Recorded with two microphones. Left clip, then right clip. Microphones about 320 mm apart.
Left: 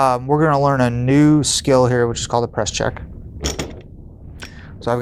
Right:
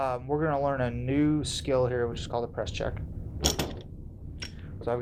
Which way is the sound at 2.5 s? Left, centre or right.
Left.